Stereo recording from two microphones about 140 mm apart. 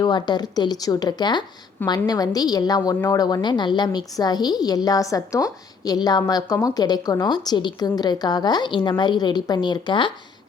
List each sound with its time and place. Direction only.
0.0 s a woman's voice: 30° left (ahead or behind)